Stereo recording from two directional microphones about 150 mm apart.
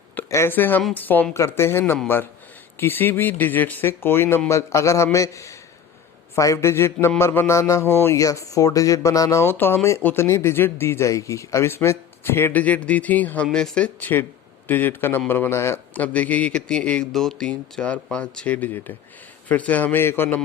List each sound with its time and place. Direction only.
0.2 s a man's voice: 15° left (ahead or behind)